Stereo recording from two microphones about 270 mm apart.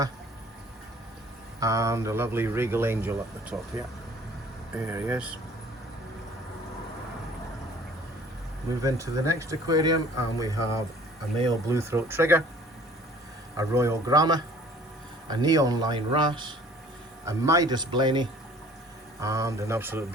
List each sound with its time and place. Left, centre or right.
1.5 s speech: centre
4.7 s speech: centre
8.8 s speech: centre
13.6 s speech: centre